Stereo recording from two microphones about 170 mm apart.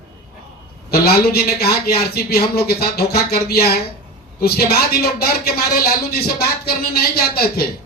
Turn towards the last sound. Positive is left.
turn(degrees=65)  # may be behind; listen again after turning